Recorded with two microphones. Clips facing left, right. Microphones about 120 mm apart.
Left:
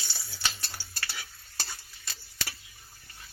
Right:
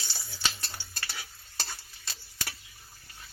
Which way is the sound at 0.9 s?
15° right (ahead or behind).